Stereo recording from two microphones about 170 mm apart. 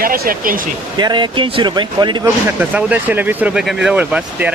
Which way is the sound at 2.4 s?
10° right (ahead or behind).